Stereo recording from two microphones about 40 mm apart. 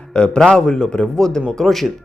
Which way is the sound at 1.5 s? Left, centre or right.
Centre.